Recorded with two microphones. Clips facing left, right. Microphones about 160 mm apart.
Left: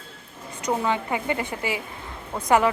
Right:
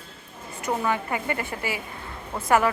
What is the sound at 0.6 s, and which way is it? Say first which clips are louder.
A woman's voice: left 1 dB; 20° left (ahead or behind).